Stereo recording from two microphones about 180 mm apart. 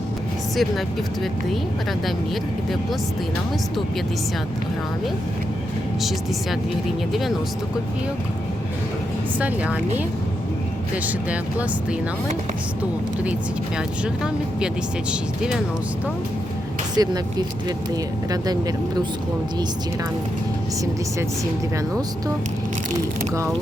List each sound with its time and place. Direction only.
6.0 s speech: centre (ahead or behind)
17.0 s speech: 20° right (ahead or behind)